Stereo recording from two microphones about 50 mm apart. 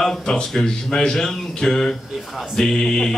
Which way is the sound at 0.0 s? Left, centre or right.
Centre.